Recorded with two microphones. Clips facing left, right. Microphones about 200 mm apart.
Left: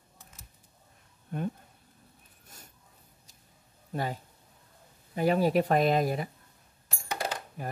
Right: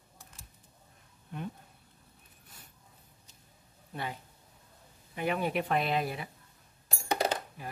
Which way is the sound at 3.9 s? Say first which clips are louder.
Left 6 dB; 40° left (ahead or behind).